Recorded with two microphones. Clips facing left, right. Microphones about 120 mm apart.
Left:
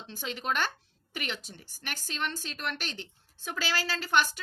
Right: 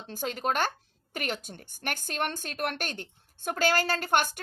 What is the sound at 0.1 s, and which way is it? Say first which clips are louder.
Speech: right 3 dB; 45° right (ahead or behind).